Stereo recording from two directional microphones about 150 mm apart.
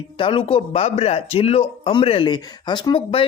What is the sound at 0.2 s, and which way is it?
A man's voice, 35° left (ahead or behind).